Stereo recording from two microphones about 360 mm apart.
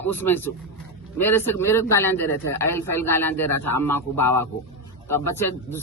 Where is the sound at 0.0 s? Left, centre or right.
Centre.